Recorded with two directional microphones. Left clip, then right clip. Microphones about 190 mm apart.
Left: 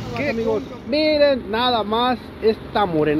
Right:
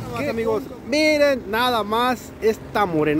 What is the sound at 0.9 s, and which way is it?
Speech, 40° right (ahead or behind).